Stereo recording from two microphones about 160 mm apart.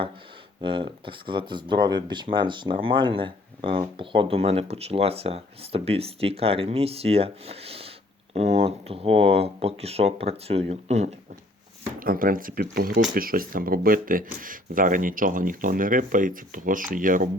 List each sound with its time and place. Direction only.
0.6 s speech: 35° right (ahead or behind)
11.9 s speech: 65° right (ahead or behind)